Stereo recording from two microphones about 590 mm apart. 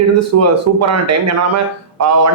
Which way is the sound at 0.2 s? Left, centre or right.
Right.